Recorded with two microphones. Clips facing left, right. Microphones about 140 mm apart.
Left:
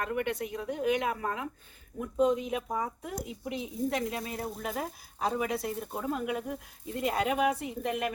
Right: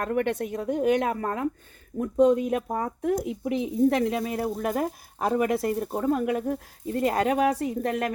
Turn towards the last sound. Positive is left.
turn(degrees=-45)  # may be behind; listen again after turning